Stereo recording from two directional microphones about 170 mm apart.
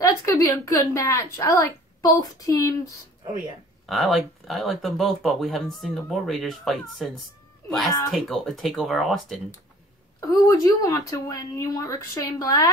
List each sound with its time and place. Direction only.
0.0 s speech: 20° left (ahead or behind)
3.8 s speech: centre (ahead or behind)
8.1 s speech: centre (ahead or behind)
10.2 s speech: 20° left (ahead or behind)